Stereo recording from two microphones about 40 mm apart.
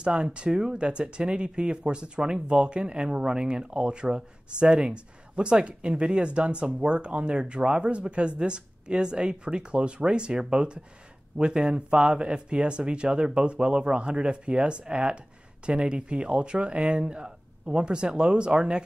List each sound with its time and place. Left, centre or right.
0.0 s speech: right